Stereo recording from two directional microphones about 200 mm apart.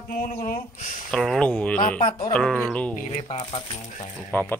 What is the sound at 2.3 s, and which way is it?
Speech, 5° left (ahead or behind).